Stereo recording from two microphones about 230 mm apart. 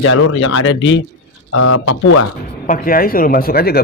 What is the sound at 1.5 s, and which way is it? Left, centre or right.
Speech, left.